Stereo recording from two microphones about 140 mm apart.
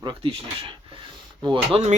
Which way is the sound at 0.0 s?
40° right (ahead or behind).